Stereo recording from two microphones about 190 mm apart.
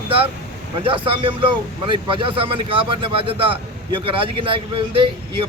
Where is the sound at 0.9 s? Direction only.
25° right (ahead or behind).